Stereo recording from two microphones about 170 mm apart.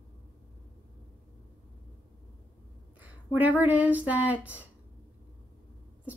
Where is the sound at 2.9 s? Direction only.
10° right (ahead or behind).